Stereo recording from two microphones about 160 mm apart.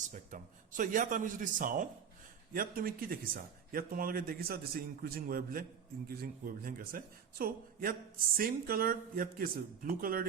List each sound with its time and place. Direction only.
0.1 s a man's voice: 55° right (ahead or behind)